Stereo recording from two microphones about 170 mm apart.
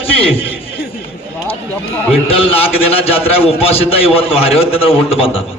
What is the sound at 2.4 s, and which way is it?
A man's voice, 35° left (ahead or behind).